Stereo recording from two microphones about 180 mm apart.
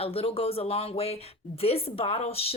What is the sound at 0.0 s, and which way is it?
Speech, 30° left (ahead or behind).